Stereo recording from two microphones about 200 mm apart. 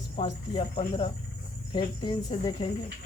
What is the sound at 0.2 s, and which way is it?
Speech, 30° left (ahead or behind).